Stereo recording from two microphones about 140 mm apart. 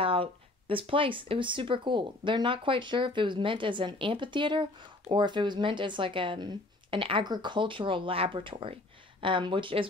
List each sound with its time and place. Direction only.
0.0 s speech: 40° right (ahead or behind)